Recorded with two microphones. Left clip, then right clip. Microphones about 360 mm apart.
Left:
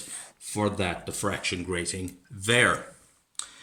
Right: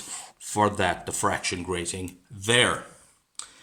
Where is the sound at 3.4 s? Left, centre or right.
Centre.